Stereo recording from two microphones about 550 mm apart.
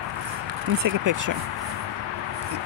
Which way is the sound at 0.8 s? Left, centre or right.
Right.